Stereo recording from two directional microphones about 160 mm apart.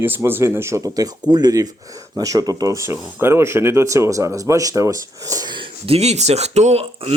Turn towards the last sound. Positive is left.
turn(degrees=-40)  # may be behind; listen again after turning